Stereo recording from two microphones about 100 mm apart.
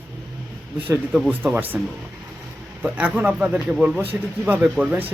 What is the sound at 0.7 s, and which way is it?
Speech, 20° right (ahead or behind).